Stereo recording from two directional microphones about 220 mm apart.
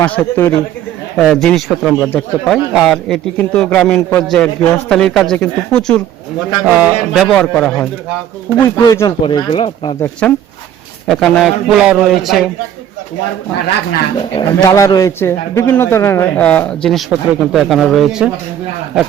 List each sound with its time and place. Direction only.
0.0 s a man's voice: 10° left (ahead or behind); by 9.9 s 25° left (ahead or behind)
10.0 s a man's voice: 10° left (ahead or behind)
14.3 s a man's voice: 15° left (ahead or behind); by 18.3 s centre (ahead or behind)